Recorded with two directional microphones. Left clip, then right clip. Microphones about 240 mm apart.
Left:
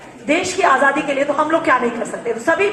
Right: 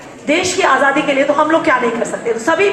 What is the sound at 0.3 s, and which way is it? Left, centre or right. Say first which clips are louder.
A woman's voice: right 2 dB; centre.